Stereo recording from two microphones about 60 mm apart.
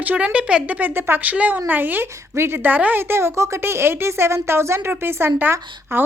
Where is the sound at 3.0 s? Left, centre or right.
Right.